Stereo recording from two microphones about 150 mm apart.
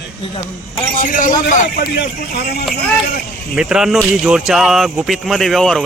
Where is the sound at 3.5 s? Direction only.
5° right (ahead or behind).